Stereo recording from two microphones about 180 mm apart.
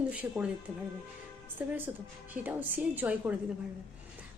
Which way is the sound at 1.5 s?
10° right (ahead or behind).